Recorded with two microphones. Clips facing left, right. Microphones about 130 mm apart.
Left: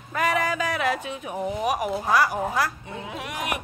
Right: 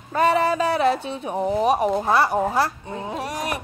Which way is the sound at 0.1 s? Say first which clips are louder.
Right 5 dB; 30° right (ahead or behind).